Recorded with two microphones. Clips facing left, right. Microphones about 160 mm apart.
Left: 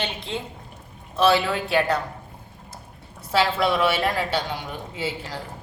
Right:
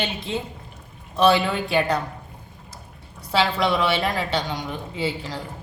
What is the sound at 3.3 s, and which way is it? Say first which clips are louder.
A man's voice: even; 5° left (ahead or behind).